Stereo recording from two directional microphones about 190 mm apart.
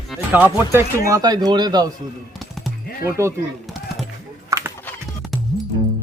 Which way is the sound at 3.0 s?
15° right (ahead or behind).